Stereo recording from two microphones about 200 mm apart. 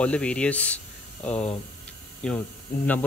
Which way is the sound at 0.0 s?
5° left (ahead or behind).